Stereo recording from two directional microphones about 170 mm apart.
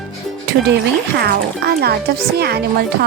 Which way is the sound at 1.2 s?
70° right (ahead or behind).